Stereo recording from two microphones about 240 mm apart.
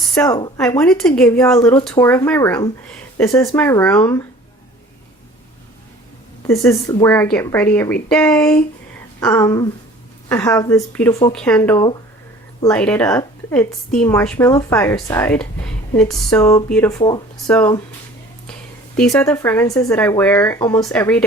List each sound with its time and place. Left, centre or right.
0.3 s a woman's voice: centre
0.8 s a woman's voice: centre
6.5 s a woman's voice: centre
18.9 s a woman's voice: centre